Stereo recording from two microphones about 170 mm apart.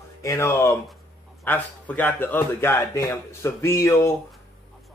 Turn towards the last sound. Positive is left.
turn(degrees=15)  # may be behind; listen again after turning